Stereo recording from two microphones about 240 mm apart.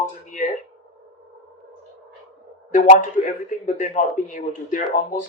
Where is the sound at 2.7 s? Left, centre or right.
Left.